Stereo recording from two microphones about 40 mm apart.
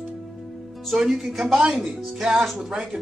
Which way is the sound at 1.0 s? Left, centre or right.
Centre.